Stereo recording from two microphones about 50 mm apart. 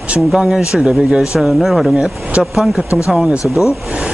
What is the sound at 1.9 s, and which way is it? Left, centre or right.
Speech, centre.